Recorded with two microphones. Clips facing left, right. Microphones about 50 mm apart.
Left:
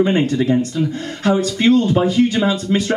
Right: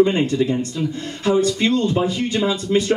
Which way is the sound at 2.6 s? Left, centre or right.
Left.